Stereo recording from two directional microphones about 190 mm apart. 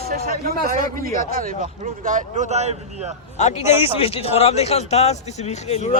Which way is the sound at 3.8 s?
30° left (ahead or behind).